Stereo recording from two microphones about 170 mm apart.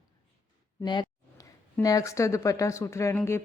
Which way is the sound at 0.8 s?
25° left (ahead or behind).